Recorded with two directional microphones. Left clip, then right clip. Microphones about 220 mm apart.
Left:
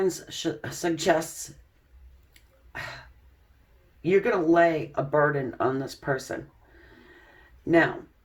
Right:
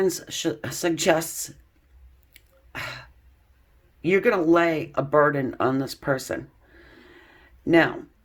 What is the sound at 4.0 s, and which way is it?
Speech, 45° right (ahead or behind).